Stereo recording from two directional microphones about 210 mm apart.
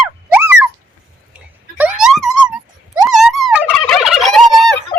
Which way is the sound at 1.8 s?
5° right (ahead or behind).